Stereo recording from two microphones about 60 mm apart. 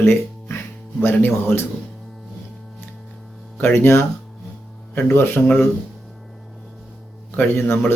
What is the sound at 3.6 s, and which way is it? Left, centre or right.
Speech, left.